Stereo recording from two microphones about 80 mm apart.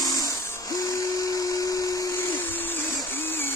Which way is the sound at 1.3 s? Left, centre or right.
Left.